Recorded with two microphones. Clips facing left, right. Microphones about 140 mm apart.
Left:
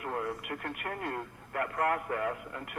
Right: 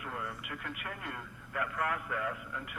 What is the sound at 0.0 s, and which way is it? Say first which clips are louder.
A man's voice: left 6 dB; 45° left (ahead or behind).